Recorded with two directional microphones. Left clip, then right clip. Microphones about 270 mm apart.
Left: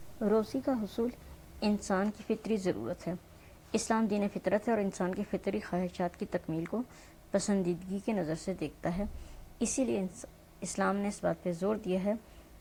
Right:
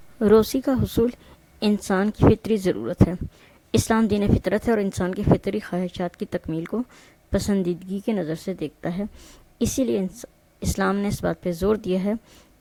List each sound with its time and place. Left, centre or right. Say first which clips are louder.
0.2 s speech: right 13 dB; right